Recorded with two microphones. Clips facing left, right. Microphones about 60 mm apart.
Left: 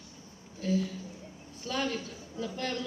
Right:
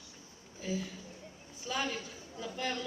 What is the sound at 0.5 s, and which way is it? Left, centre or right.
A man's voice, centre.